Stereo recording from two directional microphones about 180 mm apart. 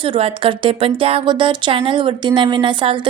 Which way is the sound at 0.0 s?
30° right (ahead or behind).